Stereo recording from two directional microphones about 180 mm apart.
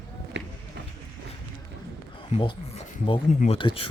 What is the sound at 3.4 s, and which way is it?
Speech, 30° left (ahead or behind).